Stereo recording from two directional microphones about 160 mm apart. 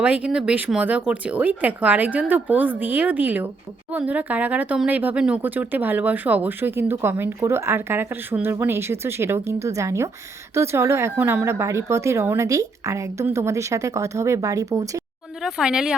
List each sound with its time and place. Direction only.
0.0 s speech: 5° right (ahead or behind)
15.4 s speech: centre (ahead or behind)